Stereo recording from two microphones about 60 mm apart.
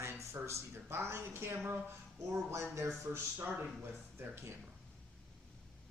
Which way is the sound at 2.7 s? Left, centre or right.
Right.